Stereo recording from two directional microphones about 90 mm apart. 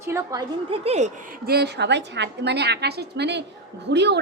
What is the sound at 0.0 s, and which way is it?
Speech, 35° right (ahead or behind).